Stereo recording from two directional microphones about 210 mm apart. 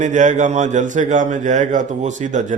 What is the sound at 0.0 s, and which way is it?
Speech, 35° right (ahead or behind).